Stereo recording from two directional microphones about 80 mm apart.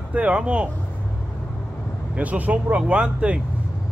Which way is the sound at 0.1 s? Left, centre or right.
Centre.